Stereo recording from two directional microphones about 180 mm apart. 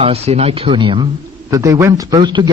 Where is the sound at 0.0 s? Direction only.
35° right (ahead or behind).